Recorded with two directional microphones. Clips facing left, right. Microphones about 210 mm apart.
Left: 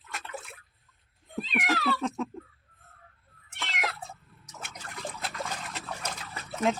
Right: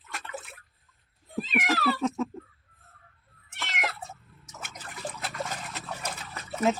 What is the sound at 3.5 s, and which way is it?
Cat, centre (ahead or behind).